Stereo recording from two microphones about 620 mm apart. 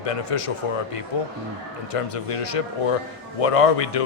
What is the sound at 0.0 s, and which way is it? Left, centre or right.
A man's voice, left.